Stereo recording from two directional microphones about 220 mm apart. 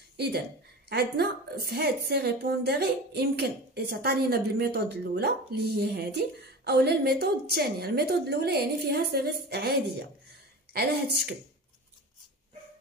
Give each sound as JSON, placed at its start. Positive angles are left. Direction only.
{"t": 0.8, "sound": "a woman's voice", "side_deg": -45}